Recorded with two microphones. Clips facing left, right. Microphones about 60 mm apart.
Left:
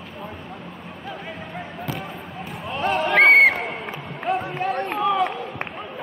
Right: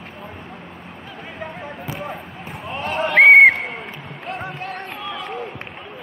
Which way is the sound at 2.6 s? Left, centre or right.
Centre.